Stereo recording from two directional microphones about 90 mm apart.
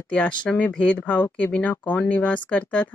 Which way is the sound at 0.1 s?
15° left (ahead or behind).